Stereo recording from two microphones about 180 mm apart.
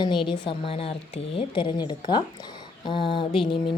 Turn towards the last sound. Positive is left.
turn(degrees=30)  # may be behind; listen again after turning